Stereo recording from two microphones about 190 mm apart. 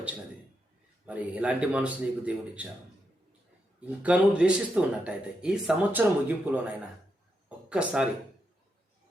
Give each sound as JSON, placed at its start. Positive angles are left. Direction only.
{"t": 1.0, "sound": "speech", "side_deg": -5}
{"t": 3.8, "sound": "speech", "side_deg": -10}
{"t": 7.7, "sound": "speech", "side_deg": -5}